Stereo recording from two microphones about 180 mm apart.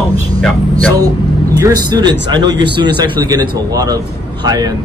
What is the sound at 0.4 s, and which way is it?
Speech, 5° left (ahead or behind).